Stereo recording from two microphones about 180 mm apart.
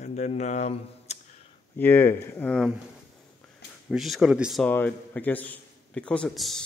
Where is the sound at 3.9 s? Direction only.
Centre (ahead or behind).